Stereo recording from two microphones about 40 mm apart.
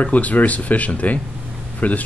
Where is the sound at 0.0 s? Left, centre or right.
Left.